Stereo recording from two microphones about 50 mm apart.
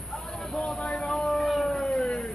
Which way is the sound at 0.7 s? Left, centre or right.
Centre.